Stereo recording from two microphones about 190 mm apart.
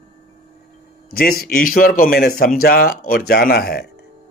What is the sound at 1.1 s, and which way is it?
Speech, 50° left (ahead or behind).